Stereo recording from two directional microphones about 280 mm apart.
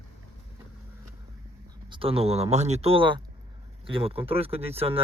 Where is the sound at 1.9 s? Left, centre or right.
Centre.